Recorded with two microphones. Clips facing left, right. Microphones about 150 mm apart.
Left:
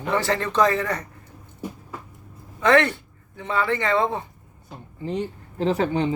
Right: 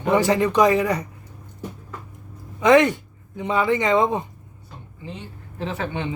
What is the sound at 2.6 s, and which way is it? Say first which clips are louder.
Speech: right 3 dB; 15° right (ahead or behind).